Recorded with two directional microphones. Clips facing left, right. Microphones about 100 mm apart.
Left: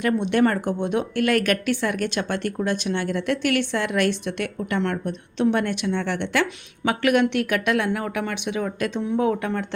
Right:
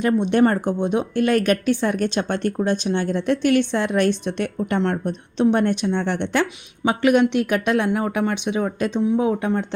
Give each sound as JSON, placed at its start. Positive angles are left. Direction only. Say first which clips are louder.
{"t": 0.0, "sound": "a woman's voice", "louder": "right 3 dB", "side_deg": -25}